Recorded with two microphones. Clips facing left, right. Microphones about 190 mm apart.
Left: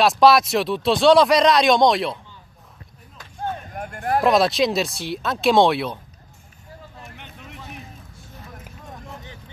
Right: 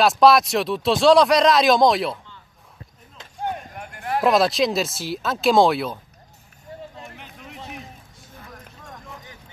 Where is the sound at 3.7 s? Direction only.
50° left (ahead or behind).